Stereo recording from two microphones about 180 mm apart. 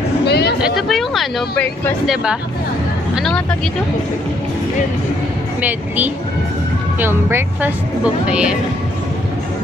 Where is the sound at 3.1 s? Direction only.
5° left (ahead or behind).